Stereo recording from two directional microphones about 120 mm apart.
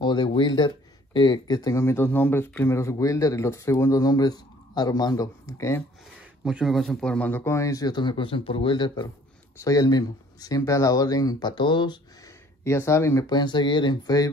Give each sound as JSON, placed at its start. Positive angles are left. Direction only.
{"t": 0.0, "sound": "speech", "side_deg": 40}
{"t": 6.4, "sound": "speech", "side_deg": -5}
{"t": 12.6, "sound": "speech", "side_deg": 25}
{"t": 13.3, "sound": "speech", "side_deg": 35}